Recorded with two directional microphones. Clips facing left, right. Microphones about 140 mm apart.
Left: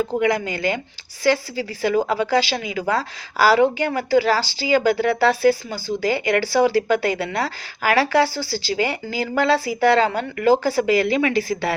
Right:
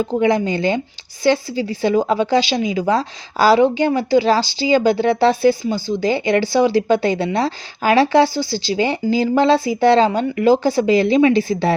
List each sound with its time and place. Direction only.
0.0 s speech: 25° right (ahead or behind)